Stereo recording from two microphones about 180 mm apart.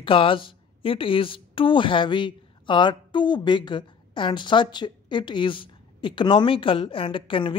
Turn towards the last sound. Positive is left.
turn(degrees=30)  # may be behind; listen again after turning